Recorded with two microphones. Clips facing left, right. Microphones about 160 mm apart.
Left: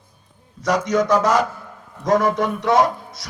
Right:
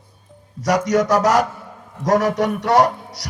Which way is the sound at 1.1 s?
85° right.